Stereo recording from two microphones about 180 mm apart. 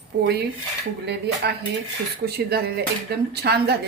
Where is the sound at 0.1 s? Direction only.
70° right (ahead or behind).